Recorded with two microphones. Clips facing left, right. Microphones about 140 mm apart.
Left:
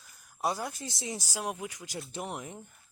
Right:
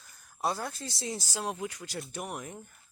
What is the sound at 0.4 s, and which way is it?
Speech, 15° left (ahead or behind).